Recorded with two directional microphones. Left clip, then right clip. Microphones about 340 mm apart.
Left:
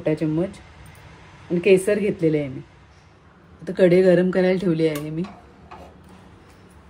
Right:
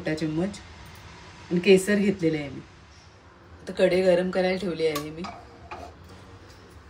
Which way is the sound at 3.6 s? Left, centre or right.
Left.